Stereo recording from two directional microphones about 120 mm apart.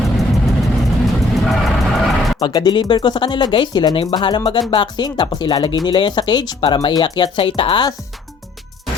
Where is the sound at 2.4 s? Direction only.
40° left (ahead or behind).